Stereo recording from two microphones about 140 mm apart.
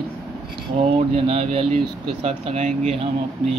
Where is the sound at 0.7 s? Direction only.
45° right (ahead or behind).